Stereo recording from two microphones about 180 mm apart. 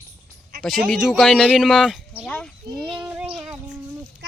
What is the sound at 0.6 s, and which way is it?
Speech, centre (ahead or behind).